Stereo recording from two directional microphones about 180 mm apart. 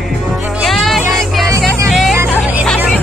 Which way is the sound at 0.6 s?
Centre (ahead or behind).